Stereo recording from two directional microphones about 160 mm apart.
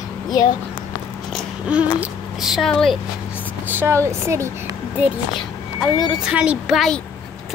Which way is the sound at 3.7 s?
15° right (ahead or behind).